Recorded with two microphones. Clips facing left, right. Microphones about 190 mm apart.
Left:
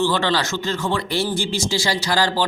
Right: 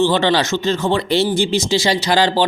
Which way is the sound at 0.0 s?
20° right (ahead or behind).